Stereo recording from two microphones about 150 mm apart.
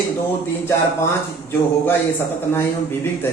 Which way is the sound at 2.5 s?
15° left (ahead or behind).